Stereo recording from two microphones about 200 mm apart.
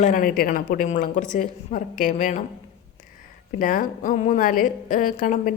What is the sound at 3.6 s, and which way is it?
A woman's voice, 40° left (ahead or behind).